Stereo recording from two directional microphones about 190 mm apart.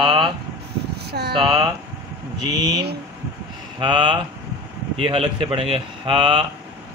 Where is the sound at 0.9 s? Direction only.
60° right (ahead or behind).